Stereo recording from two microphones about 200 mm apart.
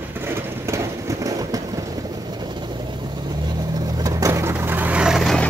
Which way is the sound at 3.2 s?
20° right (ahead or behind).